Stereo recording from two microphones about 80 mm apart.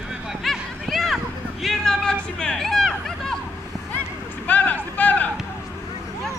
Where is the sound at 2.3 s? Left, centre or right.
Centre.